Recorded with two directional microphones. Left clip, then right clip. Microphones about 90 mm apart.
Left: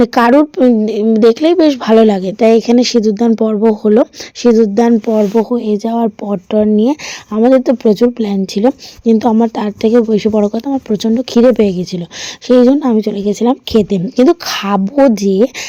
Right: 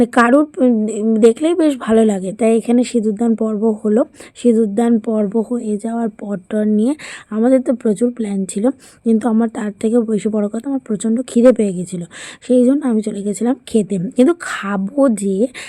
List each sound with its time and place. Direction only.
0.0 s speech: 45° left (ahead or behind)
5.5 s speech: 55° left (ahead or behind)
6.2 s speech: 45° left (ahead or behind)
7.5 s speech: 55° left (ahead or behind)
9.0 s a woman's voice: 35° left (ahead or behind)
9.4 s speech: 50° left (ahead or behind)
11.4 s speech: 60° left (ahead or behind)